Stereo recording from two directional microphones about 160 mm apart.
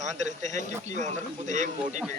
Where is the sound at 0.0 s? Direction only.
45° right (ahead or behind).